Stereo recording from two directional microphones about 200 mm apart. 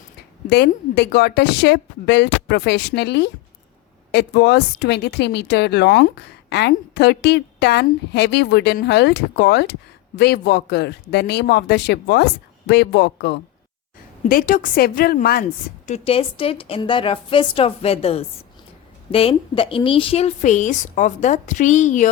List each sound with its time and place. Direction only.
0.5 s a woman's voice: 55° left (ahead or behind)
14.3 s a woman's voice: 45° left (ahead or behind)
15.9 s a woman's voice: 30° left (ahead or behind)